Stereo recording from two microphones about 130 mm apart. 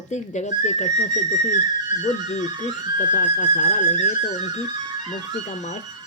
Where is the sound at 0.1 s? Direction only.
65° left (ahead or behind).